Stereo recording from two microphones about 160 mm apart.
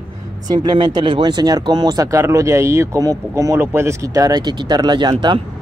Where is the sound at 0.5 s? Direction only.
30° right (ahead or behind).